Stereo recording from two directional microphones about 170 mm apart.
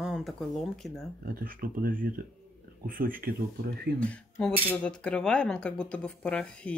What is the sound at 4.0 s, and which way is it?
Speech, 5° left (ahead or behind).